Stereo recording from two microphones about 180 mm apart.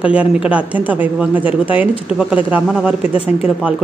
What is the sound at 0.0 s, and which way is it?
Speech, 5° right (ahead or behind).